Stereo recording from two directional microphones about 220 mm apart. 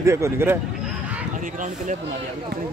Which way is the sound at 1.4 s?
35° right (ahead or behind).